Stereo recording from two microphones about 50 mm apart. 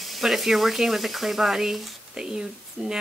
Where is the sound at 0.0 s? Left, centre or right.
Centre.